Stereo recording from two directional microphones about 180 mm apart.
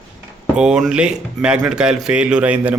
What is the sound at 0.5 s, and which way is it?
Speech, 5° right (ahead or behind).